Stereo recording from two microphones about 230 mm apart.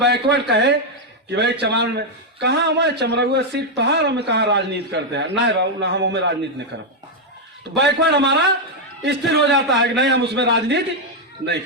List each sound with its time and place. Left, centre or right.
0.0 s a man's voice: right
7.8 s a man's voice: right